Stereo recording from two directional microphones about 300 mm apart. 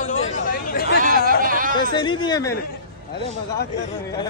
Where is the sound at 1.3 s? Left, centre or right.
Right.